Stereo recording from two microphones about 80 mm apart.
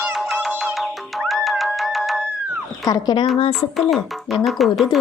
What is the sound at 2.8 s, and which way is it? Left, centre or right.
Speech, left.